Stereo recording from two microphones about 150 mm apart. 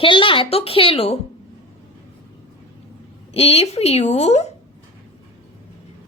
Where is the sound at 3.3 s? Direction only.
40° left (ahead or behind).